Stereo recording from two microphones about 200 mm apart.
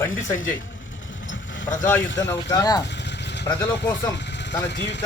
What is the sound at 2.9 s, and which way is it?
Vehicle, 60° left (ahead or behind).